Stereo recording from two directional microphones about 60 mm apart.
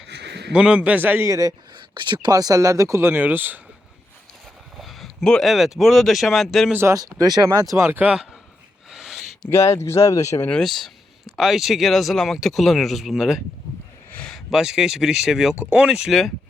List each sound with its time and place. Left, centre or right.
0.5 s a man's voice: centre
1.2 s speech: right
3.0 s speech: right
4.8 s a sound: centre
5.2 s speech: centre
5.5 s speech: centre
6.8 s speech: right
7.9 s speech: right
8.9 s a sound: centre
9.5 s speech: left
10.6 s speech: centre
15.6 s a man's voice: right
16.0 s speech: centre